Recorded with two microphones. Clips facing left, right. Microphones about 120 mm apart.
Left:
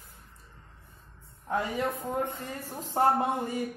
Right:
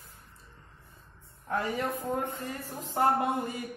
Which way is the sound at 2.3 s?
25° left (ahead or behind).